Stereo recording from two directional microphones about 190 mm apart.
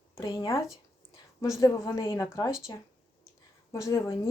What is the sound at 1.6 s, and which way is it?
Speech, 15° left (ahead or behind).